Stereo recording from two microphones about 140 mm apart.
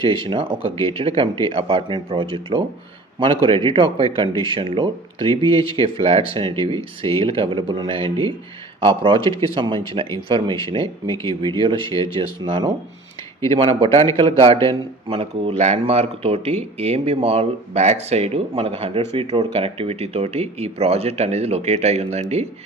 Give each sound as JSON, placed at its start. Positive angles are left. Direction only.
{"t": 0.3, "sound": "speech", "side_deg": -40}